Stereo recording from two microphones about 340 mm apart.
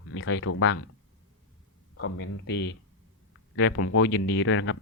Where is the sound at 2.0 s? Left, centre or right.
Left.